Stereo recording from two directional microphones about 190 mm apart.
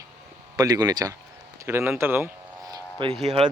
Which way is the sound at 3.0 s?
30° right (ahead or behind).